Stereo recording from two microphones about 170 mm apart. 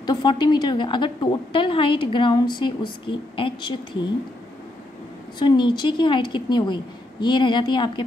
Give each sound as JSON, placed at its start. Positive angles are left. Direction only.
{"t": 0.0, "sound": "a woman's voice", "side_deg": 25}
{"t": 5.4, "sound": "a woman's voice", "side_deg": 25}